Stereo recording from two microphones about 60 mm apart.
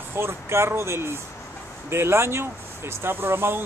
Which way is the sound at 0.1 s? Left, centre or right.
Right.